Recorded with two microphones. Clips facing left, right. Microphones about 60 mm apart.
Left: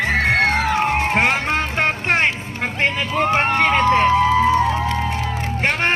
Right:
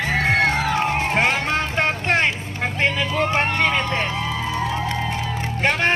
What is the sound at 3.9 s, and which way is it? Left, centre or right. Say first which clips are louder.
Music: left 10 dB; left.